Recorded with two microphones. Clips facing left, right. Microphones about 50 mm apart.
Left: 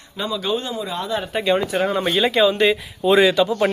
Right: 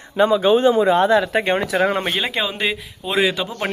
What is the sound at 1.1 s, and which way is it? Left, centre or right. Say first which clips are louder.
Speech: right 6 dB; right.